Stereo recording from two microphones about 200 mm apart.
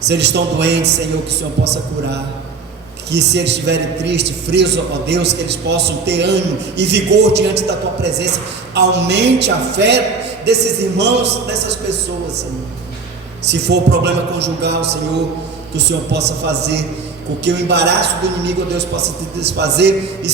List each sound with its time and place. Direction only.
0.1 s a man's voice: 60° right (ahead or behind)
13.4 s a man's voice: 60° right (ahead or behind)